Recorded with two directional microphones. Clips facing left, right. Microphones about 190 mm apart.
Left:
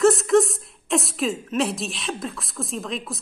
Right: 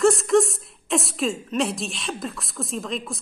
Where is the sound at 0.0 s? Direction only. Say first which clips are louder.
Left 1 dB; centre (ahead or behind).